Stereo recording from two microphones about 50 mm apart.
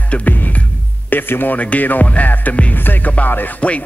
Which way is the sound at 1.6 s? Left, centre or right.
Left.